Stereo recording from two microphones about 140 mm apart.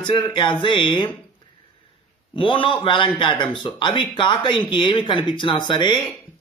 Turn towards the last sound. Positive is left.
turn(degrees=35)  # may be behind; listen again after turning